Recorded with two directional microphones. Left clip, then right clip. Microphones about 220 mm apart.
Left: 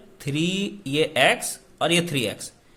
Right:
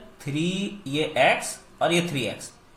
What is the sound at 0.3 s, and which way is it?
Speech, 40° left (ahead or behind).